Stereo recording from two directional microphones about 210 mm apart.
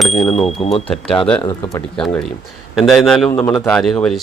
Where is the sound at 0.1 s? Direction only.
30° left (ahead or behind).